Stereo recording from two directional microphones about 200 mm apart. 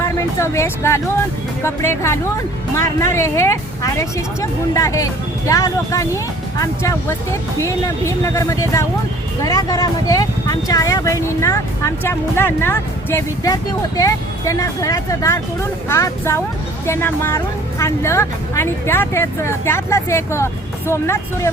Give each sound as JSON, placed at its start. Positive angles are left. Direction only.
{"t": 0.0, "sound": "speech", "side_deg": 15}